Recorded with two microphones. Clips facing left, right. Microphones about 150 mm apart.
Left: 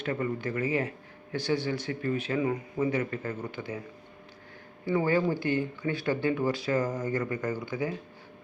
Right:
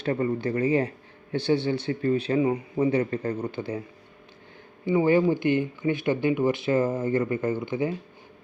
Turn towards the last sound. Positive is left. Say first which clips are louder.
# right 5 dB
turn(degrees=-25)  # may be behind; listen again after turning